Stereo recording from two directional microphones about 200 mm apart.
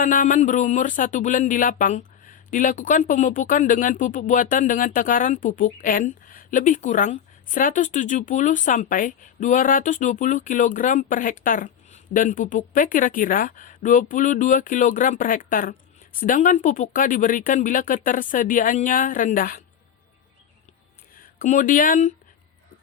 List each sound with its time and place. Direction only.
0.0 s speech: 40° left (ahead or behind)
21.3 s speech: 40° left (ahead or behind)